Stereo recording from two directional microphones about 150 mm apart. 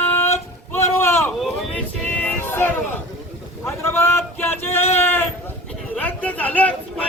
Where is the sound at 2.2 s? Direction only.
10° left (ahead or behind).